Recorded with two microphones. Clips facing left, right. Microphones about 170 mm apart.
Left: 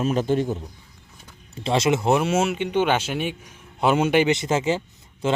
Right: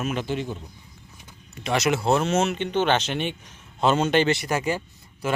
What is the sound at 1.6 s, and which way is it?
Speech, 25° left (ahead or behind).